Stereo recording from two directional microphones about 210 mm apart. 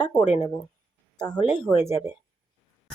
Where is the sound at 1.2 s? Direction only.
20° left (ahead or behind).